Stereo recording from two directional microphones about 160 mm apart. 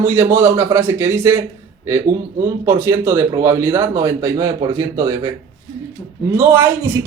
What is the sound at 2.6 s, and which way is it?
Speech, 20° right (ahead or behind).